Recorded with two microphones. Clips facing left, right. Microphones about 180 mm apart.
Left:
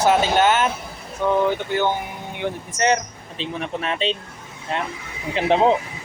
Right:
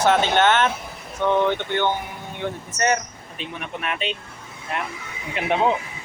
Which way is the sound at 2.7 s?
20° left (ahead or behind).